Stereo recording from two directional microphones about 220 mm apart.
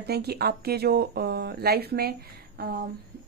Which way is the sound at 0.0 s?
45° right (ahead or behind).